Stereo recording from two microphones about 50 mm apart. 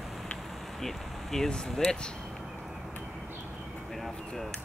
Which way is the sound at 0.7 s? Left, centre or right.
Centre.